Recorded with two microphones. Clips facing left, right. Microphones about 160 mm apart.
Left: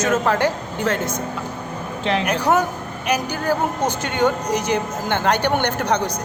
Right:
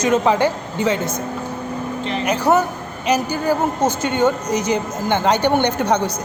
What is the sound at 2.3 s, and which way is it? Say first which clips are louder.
Speech: right 4 dB; 10° right (ahead or behind).